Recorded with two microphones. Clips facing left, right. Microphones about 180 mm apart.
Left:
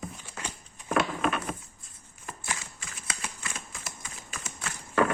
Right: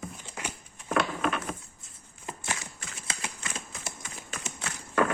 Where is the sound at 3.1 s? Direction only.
25° right (ahead or behind).